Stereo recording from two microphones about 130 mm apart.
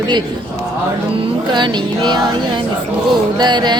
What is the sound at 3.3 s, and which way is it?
Speech, 35° right (ahead or behind).